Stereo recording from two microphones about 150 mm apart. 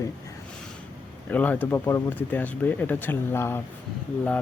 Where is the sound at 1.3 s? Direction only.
10° left (ahead or behind).